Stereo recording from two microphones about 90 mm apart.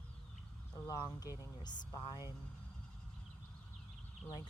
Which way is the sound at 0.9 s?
45° left (ahead or behind).